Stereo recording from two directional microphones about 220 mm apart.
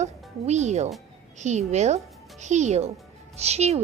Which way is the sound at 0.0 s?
30° right (ahead or behind).